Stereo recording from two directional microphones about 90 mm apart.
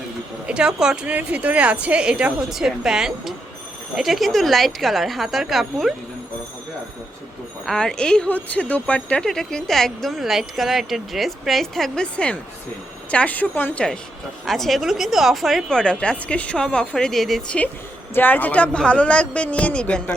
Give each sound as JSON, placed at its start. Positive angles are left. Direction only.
{"t": 0.4, "sound": "a woman's voice", "side_deg": -10}
{"t": 7.6, "sound": "speech", "side_deg": 5}
{"t": 14.4, "sound": "speech", "side_deg": 0}
{"t": 18.1, "sound": "speech", "side_deg": 20}